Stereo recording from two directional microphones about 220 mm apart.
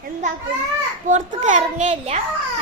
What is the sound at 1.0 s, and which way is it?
A child's voice, 35° right (ahead or behind).